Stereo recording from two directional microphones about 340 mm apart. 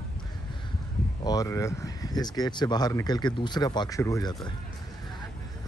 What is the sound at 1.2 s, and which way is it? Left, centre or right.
Speech, centre.